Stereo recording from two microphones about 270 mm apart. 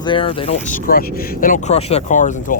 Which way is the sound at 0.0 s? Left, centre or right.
Centre.